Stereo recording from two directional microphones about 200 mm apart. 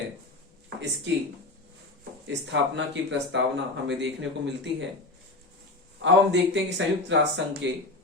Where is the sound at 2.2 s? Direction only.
65° right (ahead or behind).